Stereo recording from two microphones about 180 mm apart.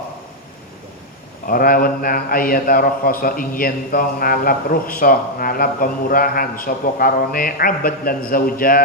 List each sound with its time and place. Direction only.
1.5 s a man's voice: 55° left (ahead or behind)